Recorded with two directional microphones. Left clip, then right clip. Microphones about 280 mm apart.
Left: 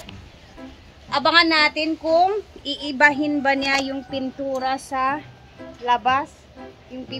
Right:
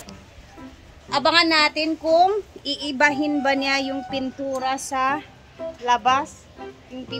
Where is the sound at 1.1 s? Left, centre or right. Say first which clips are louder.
Left 1 dB; centre.